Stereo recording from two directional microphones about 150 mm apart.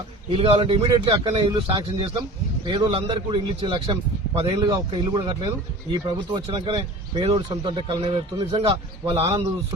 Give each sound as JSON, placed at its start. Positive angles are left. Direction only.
{"t": 0.3, "sound": "speech", "side_deg": -35}
{"t": 4.6, "sound": "speech", "side_deg": -25}